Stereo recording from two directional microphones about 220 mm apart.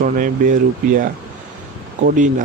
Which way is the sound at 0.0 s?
40° right (ahead or behind).